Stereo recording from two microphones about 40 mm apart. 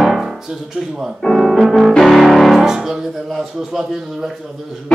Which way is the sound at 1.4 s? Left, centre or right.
Centre.